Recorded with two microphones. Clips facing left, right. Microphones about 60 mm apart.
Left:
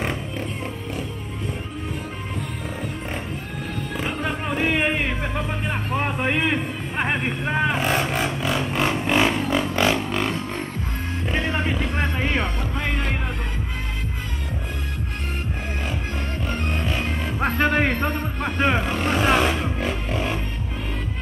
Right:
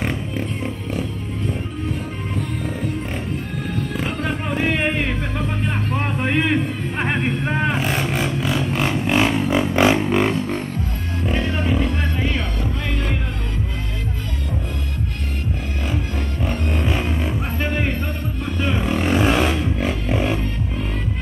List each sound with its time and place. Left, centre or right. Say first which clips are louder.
3.9 s music: left 1 dB; centre
4.9 s a sound: right 1 dB; centre
7.0 s vehicle: right 2 dB; centre
9.0 s a sound: right 2 dB; centre
9.4 s music: right 4 dB; centre
11.9 s music: even; left
16.8 s music: right 3 dB; centre
17.4 s music: left 4 dB; left
18.9 s vehicle: right 3 dB; centre
19.2 s a sound: left 1 dB; centre
19.8 s music: right 4 dB; centre